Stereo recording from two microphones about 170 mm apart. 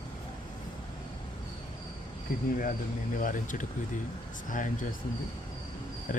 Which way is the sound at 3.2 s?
50° left (ahead or behind).